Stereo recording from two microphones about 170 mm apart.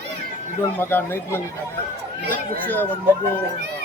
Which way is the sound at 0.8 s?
10° left (ahead or behind).